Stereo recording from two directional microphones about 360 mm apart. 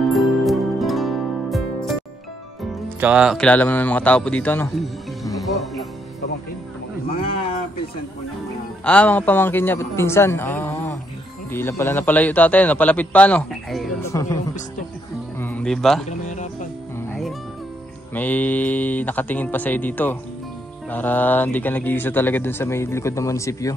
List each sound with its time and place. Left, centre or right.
0.1 s music: centre
3.0 s speech: centre
5.2 s music: centre
8.8 s a man's voice: centre
15.3 s music: centre
16.1 s music: centre
18.1 s speech: centre